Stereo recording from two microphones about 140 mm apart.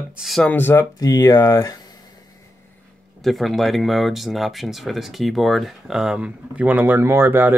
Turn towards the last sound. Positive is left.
turn(degrees=-15)  # may be behind; listen again after turning